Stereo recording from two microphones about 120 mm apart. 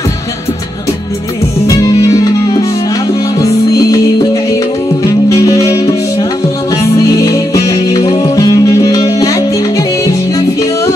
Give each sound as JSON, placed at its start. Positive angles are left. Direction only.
{"t": 1.8, "sound": "music", "side_deg": 25}
{"t": 3.3, "sound": "music", "side_deg": 30}
{"t": 5.3, "sound": "music", "side_deg": 30}
{"t": 7.2, "sound": "music", "side_deg": 25}